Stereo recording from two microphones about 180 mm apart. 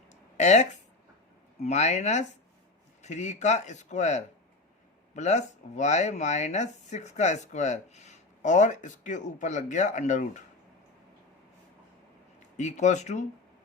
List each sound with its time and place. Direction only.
0.1 s a sound: 40° left (ahead or behind)
1.6 s speech: 40° left (ahead or behind)
12.5 s speech: 40° left (ahead or behind)